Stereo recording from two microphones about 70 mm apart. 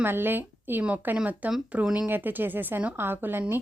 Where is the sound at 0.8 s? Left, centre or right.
Centre.